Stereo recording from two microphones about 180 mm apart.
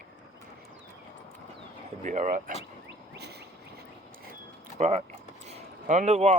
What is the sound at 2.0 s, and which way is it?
Speech, 45° right (ahead or behind).